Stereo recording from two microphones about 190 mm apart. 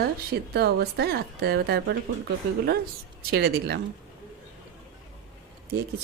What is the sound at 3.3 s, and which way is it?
Speech, 55° right (ahead or behind).